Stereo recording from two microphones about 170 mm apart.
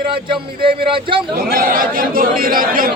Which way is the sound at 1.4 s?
60° right (ahead or behind).